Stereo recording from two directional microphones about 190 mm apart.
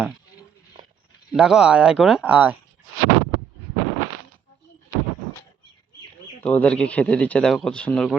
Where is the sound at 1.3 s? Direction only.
5° right (ahead or behind).